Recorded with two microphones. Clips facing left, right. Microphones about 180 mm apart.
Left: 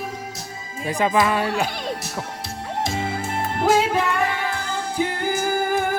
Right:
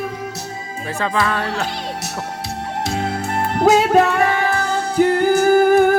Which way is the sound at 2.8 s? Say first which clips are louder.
Right 3 dB; 70° right (ahead or behind).